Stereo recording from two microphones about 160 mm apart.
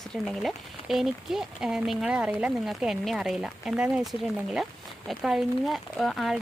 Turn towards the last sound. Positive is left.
turn(degrees=0)  # may be behind; listen again after turning